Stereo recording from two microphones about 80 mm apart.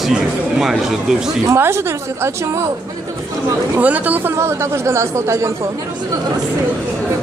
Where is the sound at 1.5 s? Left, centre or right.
Right.